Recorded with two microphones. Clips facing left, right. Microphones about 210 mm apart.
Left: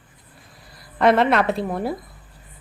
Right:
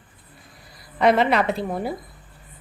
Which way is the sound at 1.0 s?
Centre (ahead or behind).